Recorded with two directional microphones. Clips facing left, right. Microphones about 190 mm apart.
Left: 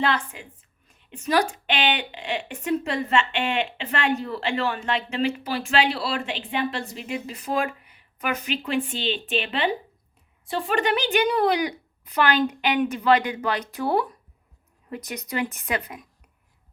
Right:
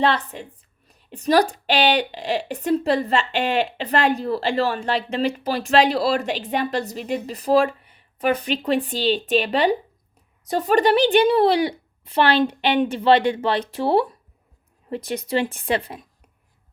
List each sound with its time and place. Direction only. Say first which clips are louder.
0.0 s a woman's voice: right 4 dB; 35° right (ahead or behind)